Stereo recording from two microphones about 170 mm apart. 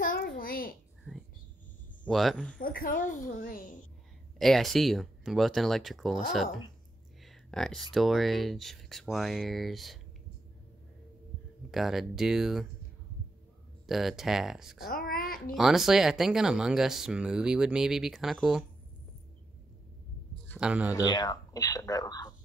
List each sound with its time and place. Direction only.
0.0 s a sound: 60° left (ahead or behind)
2.0 s speech: centre (ahead or behind)
2.6 s a woman's voice: 55° left (ahead or behind)
4.4 s speech: centre (ahead or behind)
11.7 s speech: centre (ahead or behind)
13.8 s speech: centre (ahead or behind)
14.8 s speech: 60° left (ahead or behind)
15.5 s speech: centre (ahead or behind)
20.5 s speech: 5° right (ahead or behind)
20.9 s speech: 25° left (ahead or behind)